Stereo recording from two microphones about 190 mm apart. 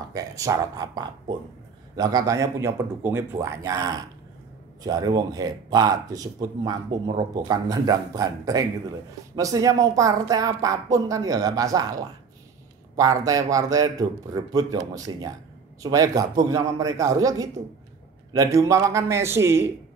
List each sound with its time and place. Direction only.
0.1 s a woman's voice: 20° right (ahead or behind)